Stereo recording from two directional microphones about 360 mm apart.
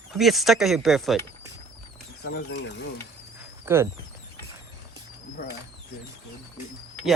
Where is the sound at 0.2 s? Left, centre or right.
Centre.